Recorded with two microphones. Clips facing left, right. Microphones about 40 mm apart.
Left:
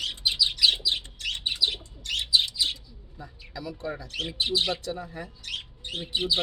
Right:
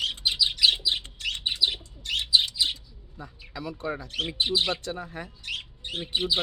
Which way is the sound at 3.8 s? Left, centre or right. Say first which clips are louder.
Right 3 dB; right.